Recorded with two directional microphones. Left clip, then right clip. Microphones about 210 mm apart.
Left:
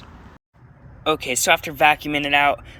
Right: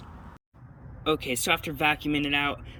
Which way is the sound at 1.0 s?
10° right (ahead or behind).